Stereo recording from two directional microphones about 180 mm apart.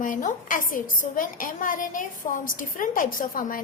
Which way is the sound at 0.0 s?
45° left (ahead or behind).